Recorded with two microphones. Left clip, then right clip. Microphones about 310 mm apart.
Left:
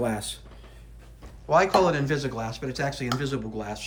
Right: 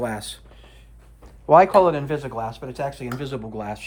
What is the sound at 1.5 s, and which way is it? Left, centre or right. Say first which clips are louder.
Speech: right 6 dB; centre.